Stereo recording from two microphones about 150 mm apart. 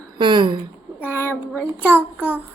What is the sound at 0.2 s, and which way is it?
Speech, 30° right (ahead or behind).